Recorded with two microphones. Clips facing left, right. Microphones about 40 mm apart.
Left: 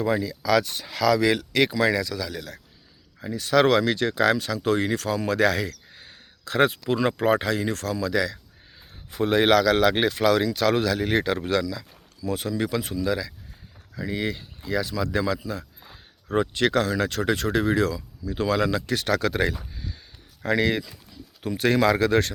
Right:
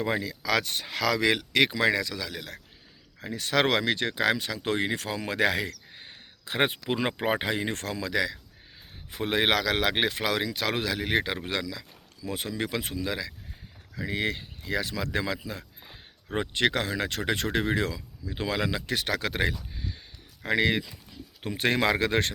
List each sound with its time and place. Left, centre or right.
0.0 s speech: right
3.2 s speech: right
15.8 s speech: centre
19.7 s a sound: centre
20.4 s speech: centre